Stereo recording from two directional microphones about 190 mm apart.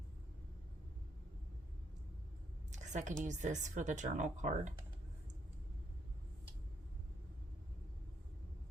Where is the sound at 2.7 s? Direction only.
40° right (ahead or behind).